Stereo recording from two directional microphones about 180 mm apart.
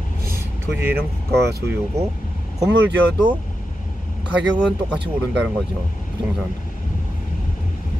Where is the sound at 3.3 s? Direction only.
25° right (ahead or behind).